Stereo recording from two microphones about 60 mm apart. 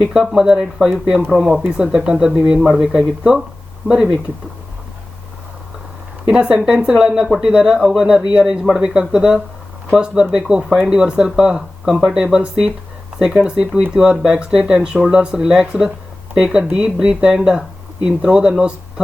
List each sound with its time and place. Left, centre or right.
0.0 s speech: centre
1.3 s speech: centre
6.2 s speech: centre